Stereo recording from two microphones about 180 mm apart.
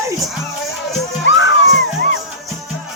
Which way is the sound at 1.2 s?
90° left.